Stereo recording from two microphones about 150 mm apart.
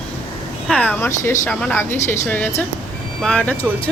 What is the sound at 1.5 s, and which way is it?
Speech, 5° left (ahead or behind).